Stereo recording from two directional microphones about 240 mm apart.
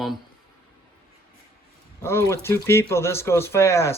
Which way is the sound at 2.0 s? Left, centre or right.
Centre.